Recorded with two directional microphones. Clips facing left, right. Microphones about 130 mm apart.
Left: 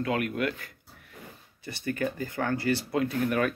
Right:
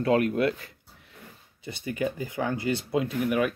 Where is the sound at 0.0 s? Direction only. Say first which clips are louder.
Right 5 dB; 30° right (ahead or behind).